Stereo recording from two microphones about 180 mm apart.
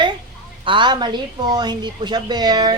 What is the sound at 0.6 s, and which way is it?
A woman's voice, 25° right (ahead or behind).